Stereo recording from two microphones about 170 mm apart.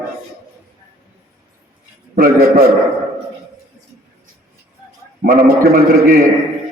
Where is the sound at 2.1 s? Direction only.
60° right (ahead or behind).